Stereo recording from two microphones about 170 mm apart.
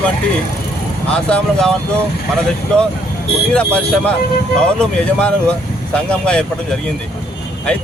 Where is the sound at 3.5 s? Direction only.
5° left (ahead or behind).